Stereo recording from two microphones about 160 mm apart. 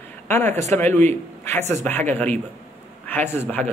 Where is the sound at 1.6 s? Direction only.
45° right (ahead or behind).